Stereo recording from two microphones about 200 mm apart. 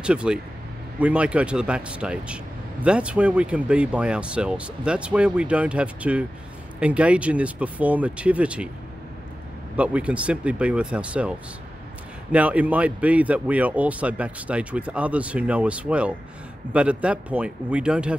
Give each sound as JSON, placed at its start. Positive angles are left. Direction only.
{"t": 0.0, "sound": "a man's voice", "side_deg": -5}
{"t": 9.8, "sound": "a man's voice", "side_deg": -5}